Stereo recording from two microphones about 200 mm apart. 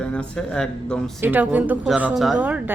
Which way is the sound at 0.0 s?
5° left (ahead or behind).